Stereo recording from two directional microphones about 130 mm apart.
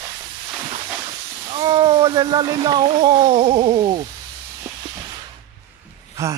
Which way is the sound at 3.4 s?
50° right (ahead or behind).